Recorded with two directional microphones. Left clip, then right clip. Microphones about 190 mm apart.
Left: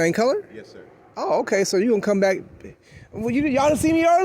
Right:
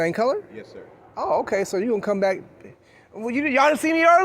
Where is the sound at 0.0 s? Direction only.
60° left (ahead or behind).